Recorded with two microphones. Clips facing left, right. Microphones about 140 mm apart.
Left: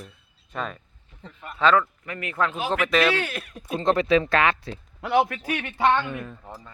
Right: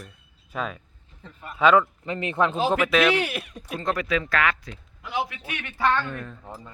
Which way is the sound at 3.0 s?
15° right (ahead or behind).